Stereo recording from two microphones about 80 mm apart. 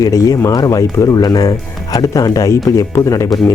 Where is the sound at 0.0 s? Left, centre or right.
Left.